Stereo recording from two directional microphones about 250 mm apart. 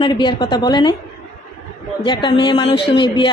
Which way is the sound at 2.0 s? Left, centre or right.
Centre.